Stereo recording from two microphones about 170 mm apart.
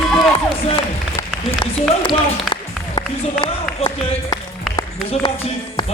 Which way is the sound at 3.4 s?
25° left (ahead or behind).